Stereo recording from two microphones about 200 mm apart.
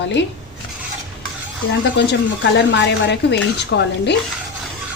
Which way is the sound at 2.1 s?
60° left (ahead or behind).